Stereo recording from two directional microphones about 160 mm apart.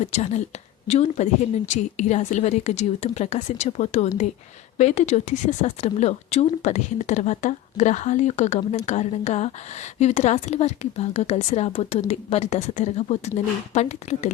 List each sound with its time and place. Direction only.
0.0 s speech: 45° left (ahead or behind)